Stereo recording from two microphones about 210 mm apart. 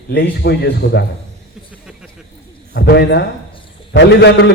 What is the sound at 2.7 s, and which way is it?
A man's voice, 50° left (ahead or behind).